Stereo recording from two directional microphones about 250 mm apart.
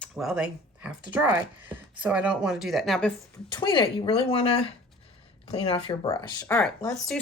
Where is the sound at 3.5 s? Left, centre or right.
Centre.